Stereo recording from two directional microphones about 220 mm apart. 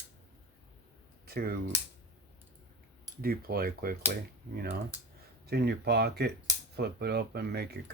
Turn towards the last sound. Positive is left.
turn(degrees=-45)  # may be behind; listen again after turning